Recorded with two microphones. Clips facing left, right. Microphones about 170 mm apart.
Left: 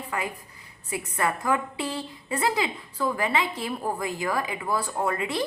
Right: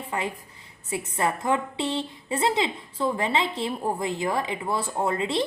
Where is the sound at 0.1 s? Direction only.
25° right (ahead or behind).